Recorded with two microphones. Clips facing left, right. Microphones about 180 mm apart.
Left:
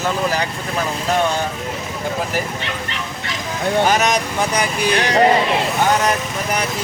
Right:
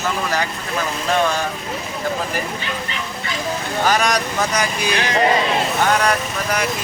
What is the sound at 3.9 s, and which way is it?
Speech, 20° left (ahead or behind).